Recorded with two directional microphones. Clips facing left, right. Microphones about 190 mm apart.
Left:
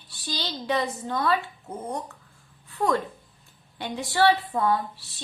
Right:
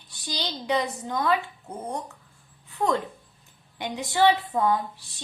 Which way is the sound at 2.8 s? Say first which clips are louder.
Left 1 dB; 20° right (ahead or behind).